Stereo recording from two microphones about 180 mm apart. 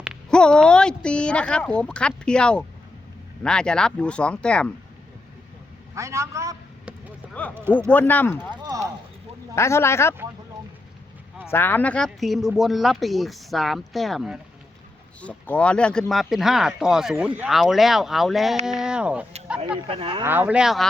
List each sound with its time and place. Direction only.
0.0 s speech: centre (ahead or behind)
5.9 s a man's voice: 15° right (ahead or behind)
7.9 s speech: 10° left (ahead or behind)
9.6 s speech: 15° left (ahead or behind)
11.4 s speech: 10° left (ahead or behind); by 19.2 s 5° right (ahead or behind)
19.9 s speech: 30° right (ahead or behind)
20.2 s a man's voice: 10° right (ahead or behind)